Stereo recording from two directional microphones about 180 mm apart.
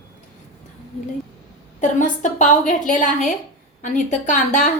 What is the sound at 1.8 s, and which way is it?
A woman's voice, 45° left (ahead or behind).